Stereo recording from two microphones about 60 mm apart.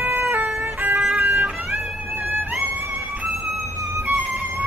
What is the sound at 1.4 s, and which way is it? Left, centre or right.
Music, centre.